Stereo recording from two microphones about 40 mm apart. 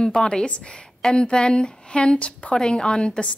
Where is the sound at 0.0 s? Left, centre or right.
Centre.